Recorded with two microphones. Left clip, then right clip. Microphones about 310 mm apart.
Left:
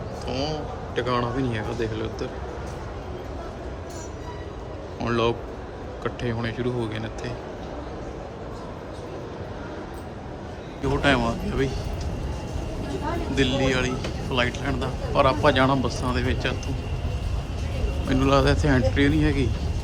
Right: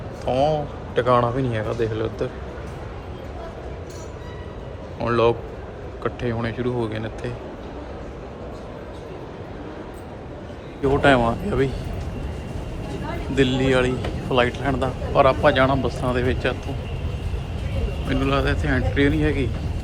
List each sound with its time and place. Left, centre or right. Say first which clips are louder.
0.3 s speech: right 9 dB; centre
4.9 s a man's voice: right 5 dB; centre
11.0 s speech: right 4 dB; centre
13.3 s speech: right 5 dB; centre
18.1 s speech: left 2 dB; centre